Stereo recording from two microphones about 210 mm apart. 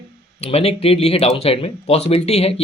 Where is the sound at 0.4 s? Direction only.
30° left (ahead or behind).